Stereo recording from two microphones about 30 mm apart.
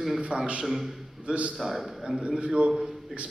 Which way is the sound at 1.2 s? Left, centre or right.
Right.